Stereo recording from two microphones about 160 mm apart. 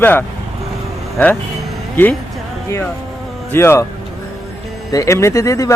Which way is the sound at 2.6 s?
15° left (ahead or behind).